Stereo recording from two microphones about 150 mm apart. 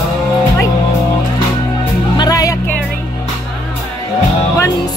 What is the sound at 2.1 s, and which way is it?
Speech, 25° left (ahead or behind).